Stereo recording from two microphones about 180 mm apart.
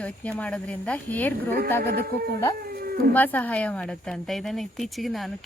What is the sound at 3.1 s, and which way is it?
Speech, 10° left (ahead or behind).